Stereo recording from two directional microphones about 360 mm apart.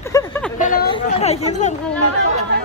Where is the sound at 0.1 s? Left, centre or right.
Centre.